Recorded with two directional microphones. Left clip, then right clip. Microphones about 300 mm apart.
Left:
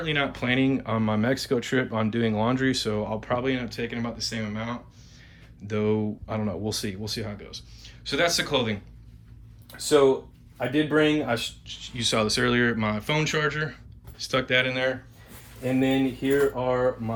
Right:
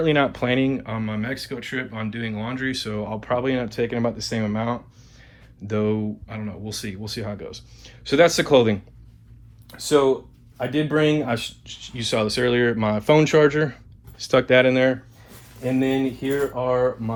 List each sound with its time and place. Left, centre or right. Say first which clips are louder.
0.0 s speech: right 7 dB; centre